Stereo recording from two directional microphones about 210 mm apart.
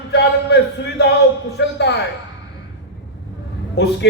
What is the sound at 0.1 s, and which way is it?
A man's voice, 55° left (ahead or behind).